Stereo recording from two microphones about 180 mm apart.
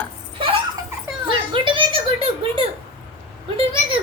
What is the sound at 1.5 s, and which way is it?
Speech, 25° right (ahead or behind).